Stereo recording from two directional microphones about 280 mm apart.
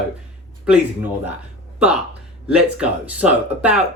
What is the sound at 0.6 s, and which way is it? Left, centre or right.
Speech, centre.